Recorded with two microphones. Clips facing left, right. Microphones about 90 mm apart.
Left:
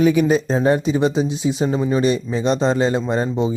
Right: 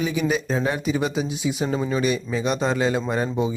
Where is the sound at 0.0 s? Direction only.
55° left (ahead or behind).